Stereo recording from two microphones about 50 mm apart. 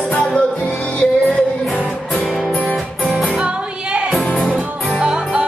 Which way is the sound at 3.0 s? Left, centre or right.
Centre.